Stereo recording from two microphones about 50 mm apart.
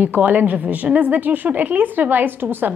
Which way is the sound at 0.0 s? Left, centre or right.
Right.